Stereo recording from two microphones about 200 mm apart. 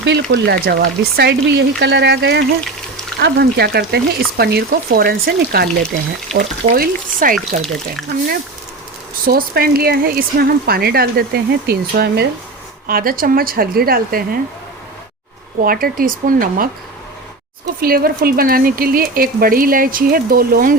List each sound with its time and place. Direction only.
0.0 s speech: 60° right (ahead or behind); by 7.3 s 45° right (ahead or behind)
9.2 s speech: 50° right (ahead or behind)
15.6 s speech: 45° right (ahead or behind)
17.7 s speech: 50° right (ahead or behind)